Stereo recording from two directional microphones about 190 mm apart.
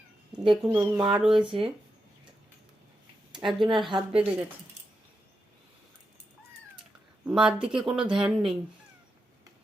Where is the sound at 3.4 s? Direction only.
Centre (ahead or behind).